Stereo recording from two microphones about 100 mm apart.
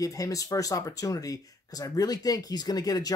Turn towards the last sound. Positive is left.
turn(degrees=40)  # may be behind; listen again after turning